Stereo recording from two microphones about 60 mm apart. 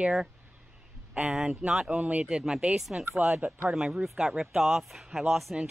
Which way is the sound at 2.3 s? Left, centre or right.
Centre.